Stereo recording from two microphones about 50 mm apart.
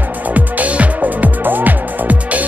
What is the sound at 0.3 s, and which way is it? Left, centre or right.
Music, right.